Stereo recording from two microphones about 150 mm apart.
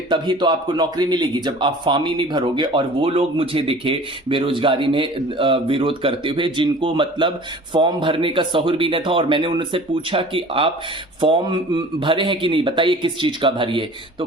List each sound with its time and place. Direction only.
0.1 s speech: 30° right (ahead or behind)